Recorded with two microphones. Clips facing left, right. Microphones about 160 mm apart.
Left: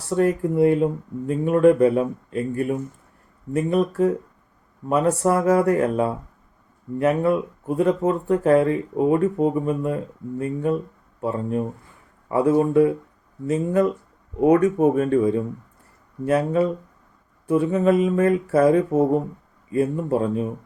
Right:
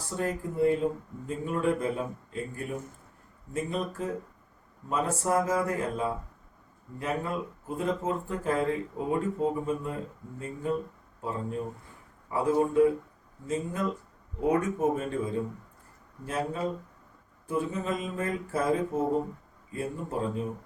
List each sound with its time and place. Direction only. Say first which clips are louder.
0.2 s speech: left 9 dB; 70° left (ahead or behind)